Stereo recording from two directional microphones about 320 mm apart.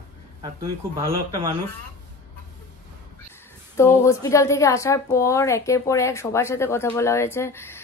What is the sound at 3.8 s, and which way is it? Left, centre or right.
A woman's voice, centre.